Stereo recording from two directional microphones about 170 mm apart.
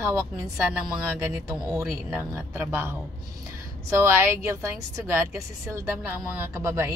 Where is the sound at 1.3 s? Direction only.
15° right (ahead or behind).